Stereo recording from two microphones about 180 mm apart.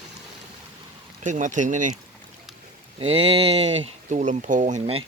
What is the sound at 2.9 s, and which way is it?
Speech, 30° right (ahead or behind).